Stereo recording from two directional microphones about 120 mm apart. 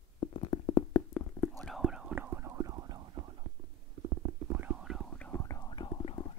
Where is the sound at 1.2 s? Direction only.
5° left (ahead or behind); by 3.2 s 35° right (ahead or behind).